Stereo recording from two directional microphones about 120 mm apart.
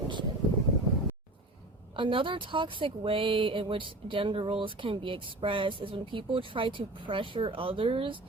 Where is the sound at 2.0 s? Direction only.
45° right (ahead or behind).